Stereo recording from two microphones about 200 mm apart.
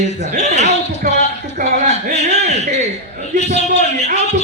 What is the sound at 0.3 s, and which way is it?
Speech, 35° right (ahead or behind).